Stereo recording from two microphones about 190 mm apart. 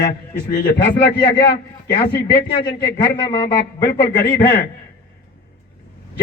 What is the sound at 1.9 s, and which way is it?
Speech, 60° left (ahead or behind).